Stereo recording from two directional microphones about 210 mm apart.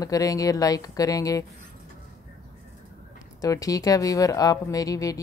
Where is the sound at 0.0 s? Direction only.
15° left (ahead or behind).